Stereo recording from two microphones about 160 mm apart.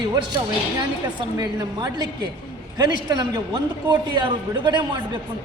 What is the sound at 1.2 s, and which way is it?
A man's voice, 25° right (ahead or behind).